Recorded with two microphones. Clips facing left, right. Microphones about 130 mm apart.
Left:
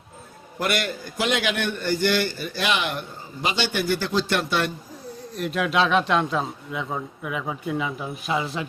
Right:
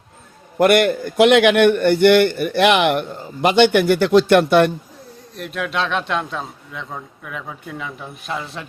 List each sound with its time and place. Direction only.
0.6 s a man's voice: 60° right (ahead or behind)
5.4 s a man's voice: centre (ahead or behind)